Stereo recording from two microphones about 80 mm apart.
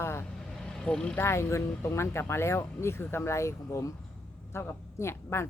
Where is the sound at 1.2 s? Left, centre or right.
Left.